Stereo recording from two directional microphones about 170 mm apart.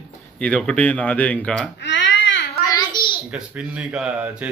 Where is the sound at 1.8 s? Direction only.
90° left.